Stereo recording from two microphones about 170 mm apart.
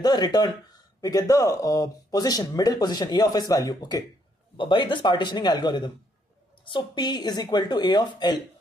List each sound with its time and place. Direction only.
0.0 s speech: 25° left (ahead or behind)